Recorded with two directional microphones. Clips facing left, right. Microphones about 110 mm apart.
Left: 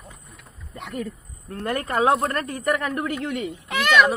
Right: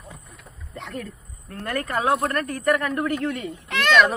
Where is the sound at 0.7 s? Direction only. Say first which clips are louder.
Left 3 dB; 5° left (ahead or behind).